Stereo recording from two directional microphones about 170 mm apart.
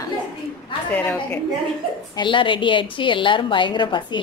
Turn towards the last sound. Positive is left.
turn(degrees=25)  # may be behind; listen again after turning